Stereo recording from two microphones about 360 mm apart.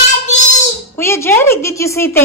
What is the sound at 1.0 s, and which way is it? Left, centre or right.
A woman's voice, centre.